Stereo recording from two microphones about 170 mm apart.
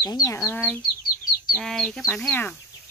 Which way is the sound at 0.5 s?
10° left (ahead or behind).